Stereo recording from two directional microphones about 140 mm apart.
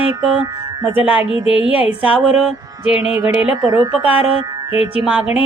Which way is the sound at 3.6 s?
25° right (ahead or behind).